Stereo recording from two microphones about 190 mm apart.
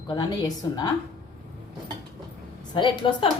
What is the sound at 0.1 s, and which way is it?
Speech, 20° left (ahead or behind).